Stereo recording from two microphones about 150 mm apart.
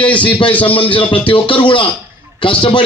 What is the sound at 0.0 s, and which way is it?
A man's voice, 35° left (ahead or behind).